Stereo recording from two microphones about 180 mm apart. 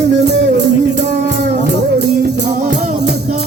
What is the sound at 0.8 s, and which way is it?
Music, 70° right (ahead or behind).